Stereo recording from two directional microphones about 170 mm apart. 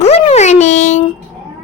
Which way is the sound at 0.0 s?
40° left (ahead or behind).